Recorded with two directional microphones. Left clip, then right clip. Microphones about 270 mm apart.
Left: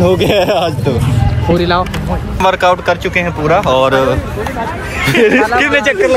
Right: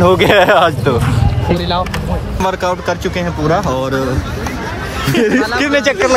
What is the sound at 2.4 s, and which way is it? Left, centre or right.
Speech, centre.